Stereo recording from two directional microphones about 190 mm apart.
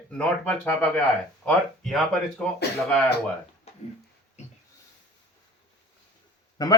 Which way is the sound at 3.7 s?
35° left (ahead or behind).